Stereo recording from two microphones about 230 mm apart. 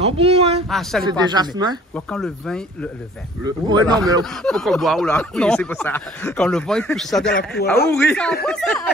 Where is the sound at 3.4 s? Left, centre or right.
Centre.